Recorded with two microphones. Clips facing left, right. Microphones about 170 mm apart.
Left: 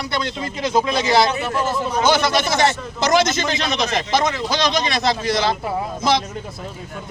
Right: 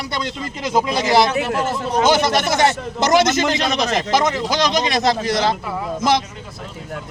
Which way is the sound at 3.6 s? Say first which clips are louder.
Right 2 dB; 40° right (ahead or behind).